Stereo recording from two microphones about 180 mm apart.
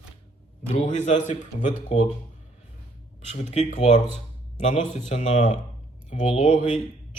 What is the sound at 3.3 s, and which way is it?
A man's voice, 40° left (ahead or behind).